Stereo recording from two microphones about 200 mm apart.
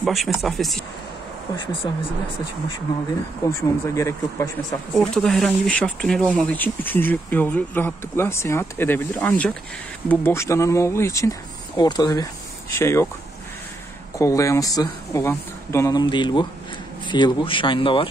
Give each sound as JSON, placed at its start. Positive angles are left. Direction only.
{"t": 0.0, "sound": "speech", "side_deg": 0}
{"t": 3.4, "sound": "speech", "side_deg": 15}
{"t": 4.9, "sound": "speech", "side_deg": 0}
{"t": 14.1, "sound": "speech", "side_deg": 15}